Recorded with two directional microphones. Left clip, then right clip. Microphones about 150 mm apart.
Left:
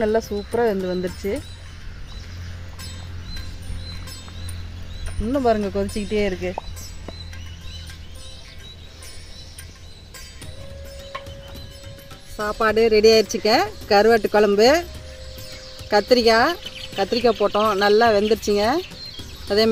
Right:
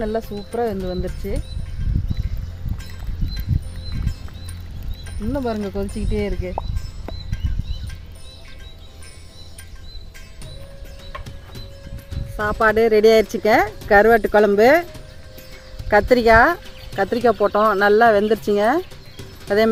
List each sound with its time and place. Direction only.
0.0 s speech: 55° left (ahead or behind)
5.3 s speech: 55° left (ahead or behind)
12.4 s speech: 25° right (ahead or behind)
14.6 s speech: 10° right (ahead or behind)
15.9 s speech: 25° right (ahead or behind)